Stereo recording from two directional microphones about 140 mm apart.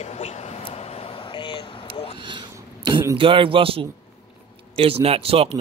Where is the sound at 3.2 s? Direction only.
40° right (ahead or behind).